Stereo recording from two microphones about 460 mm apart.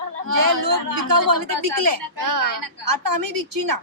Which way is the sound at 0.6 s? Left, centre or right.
Right.